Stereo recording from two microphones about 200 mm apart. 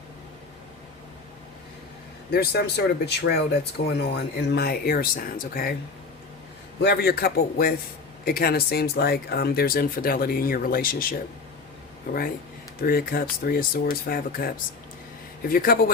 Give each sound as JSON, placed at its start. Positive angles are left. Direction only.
{"t": 2.3, "sound": "speech", "side_deg": 55}
{"t": 6.8, "sound": "speech", "side_deg": 55}